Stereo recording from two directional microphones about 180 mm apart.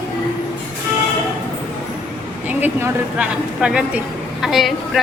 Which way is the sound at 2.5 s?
10° right (ahead or behind).